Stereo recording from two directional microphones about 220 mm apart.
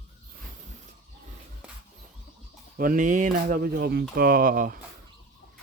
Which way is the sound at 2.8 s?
40° right (ahead or behind).